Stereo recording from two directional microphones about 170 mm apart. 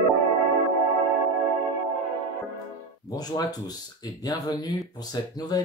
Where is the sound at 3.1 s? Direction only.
25° left (ahead or behind).